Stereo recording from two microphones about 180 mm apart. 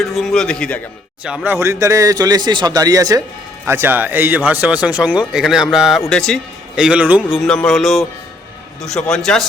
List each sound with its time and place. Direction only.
0.0 s a man's voice: centre (ahead or behind)
1.2 s speech: 5° right (ahead or behind)
1.5 s a man's voice: 15° right (ahead or behind); by 9.5 s 5° left (ahead or behind)